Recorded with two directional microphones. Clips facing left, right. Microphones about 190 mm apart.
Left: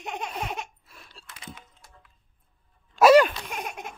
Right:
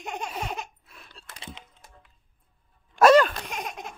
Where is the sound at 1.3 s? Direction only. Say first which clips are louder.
Right 1 dB; 30° right (ahead or behind).